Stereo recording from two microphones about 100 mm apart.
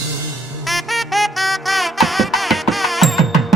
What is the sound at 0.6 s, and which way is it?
Music, centre (ahead or behind).